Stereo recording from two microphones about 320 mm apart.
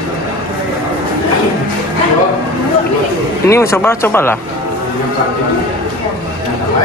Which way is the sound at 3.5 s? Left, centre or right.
Centre.